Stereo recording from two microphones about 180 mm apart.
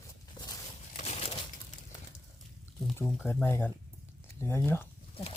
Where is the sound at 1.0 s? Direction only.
35° left (ahead or behind).